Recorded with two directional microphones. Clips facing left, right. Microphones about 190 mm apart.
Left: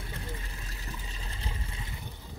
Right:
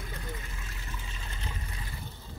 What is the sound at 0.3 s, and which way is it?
Water, 35° left (ahead or behind).